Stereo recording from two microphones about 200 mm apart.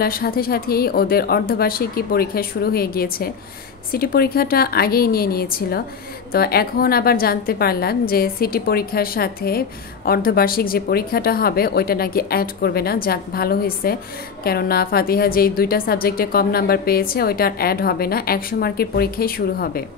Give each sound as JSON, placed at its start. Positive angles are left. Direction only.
{"t": 0.0, "sound": "a woman's voice", "side_deg": 50}